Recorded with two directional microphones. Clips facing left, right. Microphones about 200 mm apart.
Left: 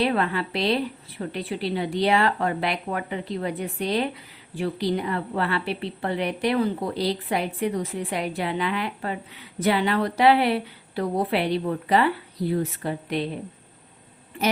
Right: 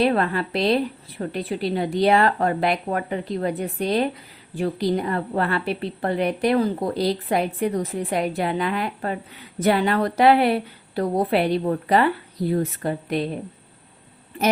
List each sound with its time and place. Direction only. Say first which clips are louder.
0.0 s a woman's voice: right 3 dB; 45° right (ahead or behind)